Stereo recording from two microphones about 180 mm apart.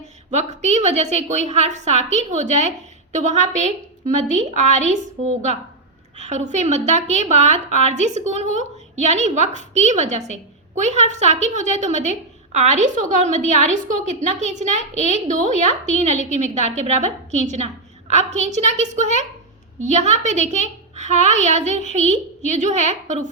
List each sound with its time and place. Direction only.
0.0 s a woman's voice: 40° right (ahead or behind)